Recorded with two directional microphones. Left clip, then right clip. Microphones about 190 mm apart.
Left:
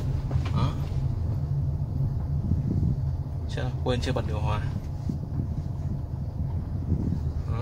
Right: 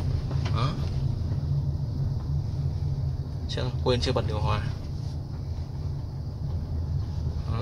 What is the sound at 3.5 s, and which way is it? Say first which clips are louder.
Speech: right 3 dB; 20° right (ahead or behind).